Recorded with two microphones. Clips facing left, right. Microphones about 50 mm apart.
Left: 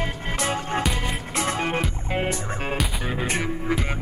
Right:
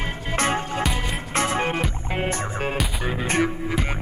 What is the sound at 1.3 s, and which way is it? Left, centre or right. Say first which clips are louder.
Music: right 3 dB; right.